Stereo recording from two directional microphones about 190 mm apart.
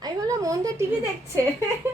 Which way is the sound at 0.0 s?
20° right (ahead or behind).